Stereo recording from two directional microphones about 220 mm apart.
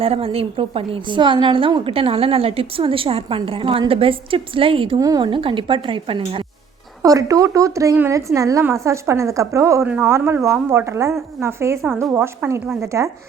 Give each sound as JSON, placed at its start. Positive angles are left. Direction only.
{"t": 0.0, "sound": "a woman's voice", "side_deg": -25}